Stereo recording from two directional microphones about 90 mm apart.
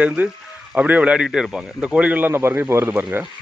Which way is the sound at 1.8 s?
15° right (ahead or behind).